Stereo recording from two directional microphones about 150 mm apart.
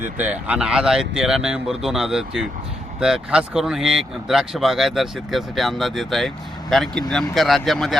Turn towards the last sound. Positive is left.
turn(degrees=0)  # may be behind; listen again after turning